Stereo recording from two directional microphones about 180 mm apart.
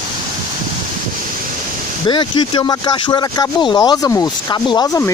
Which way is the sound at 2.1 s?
25° left (ahead or behind).